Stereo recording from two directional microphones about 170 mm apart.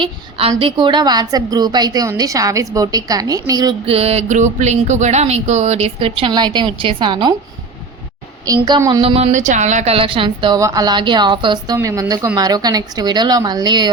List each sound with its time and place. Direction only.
0.0 s a woman's voice: 35° right (ahead or behind)
3.8 s speech: 35° right (ahead or behind)
8.4 s a woman's voice: 25° right (ahead or behind)